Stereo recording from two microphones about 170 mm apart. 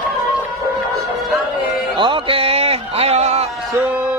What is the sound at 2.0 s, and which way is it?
Music, 30° right (ahead or behind).